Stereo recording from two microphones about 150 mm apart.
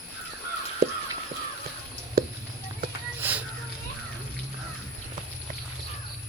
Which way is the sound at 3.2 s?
15° right (ahead or behind).